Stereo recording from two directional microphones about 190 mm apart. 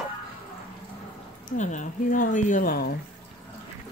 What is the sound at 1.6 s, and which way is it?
Speech, 40° left (ahead or behind).